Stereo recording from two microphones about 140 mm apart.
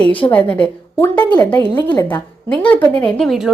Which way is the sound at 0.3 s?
10° left (ahead or behind).